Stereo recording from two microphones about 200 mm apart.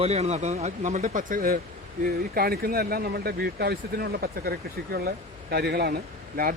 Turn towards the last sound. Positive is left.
turn(degrees=-50)  # may be behind; listen again after turning